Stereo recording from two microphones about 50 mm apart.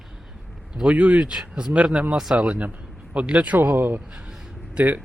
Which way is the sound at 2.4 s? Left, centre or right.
Right.